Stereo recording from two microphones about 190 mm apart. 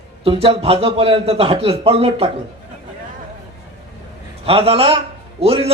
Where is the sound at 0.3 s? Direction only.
30° right (ahead or behind).